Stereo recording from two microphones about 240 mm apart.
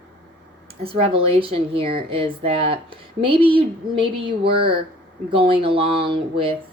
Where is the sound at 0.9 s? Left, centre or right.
Right.